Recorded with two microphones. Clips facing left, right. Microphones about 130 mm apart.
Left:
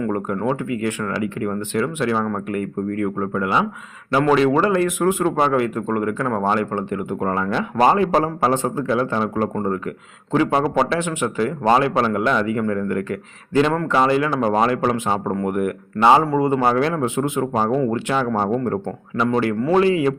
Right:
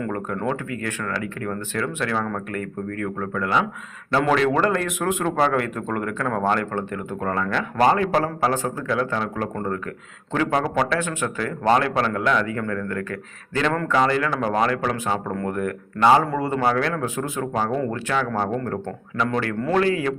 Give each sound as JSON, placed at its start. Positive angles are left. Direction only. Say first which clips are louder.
{"t": 0.1, "sound": "speech", "louder": "left 4 dB", "side_deg": 10}
{"t": 4.2, "sound": "a man's voice", "louder": "left 4 dB", "side_deg": 5}
{"t": 16.6, "sound": "a man's voice", "louder": "left 3 dB", "side_deg": 25}